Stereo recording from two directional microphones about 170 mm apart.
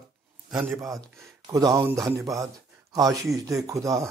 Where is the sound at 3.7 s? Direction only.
20° right (ahead or behind).